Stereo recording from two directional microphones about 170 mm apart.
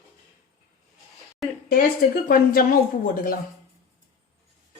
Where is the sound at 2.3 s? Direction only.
55° left (ahead or behind).